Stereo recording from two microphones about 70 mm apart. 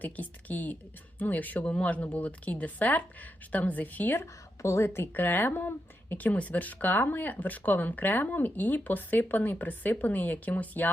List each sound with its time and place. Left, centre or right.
0.0 s speech: left
4.2 s speech: left